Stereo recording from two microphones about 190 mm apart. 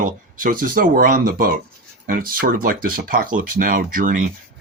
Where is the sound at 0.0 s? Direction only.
45° right (ahead or behind).